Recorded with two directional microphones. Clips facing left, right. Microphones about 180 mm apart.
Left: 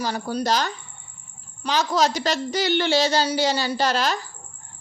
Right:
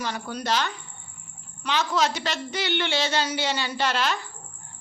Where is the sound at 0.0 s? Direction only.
35° left (ahead or behind).